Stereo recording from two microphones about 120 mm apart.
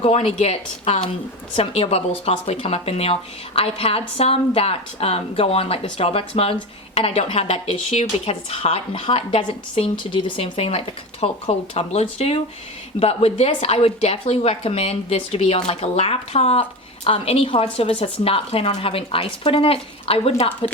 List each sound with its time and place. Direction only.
0.0 s speech: 60° left (ahead or behind)